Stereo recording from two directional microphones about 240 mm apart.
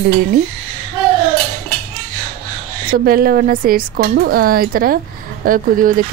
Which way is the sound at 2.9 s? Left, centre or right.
Right.